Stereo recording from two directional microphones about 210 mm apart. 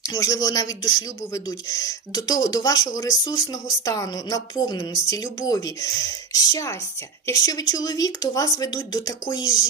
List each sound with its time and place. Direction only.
0.1 s speech: 20° left (ahead or behind)